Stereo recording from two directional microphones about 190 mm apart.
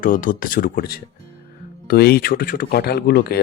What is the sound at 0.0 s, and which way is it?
Speech, 45° left (ahead or behind).